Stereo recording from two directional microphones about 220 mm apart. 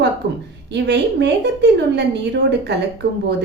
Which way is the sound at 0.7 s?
50° right (ahead or behind).